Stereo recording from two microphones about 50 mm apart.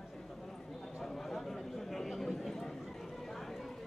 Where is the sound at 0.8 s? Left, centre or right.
Centre.